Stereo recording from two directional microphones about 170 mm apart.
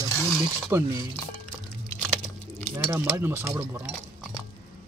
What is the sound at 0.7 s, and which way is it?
Speech, 15° right (ahead or behind).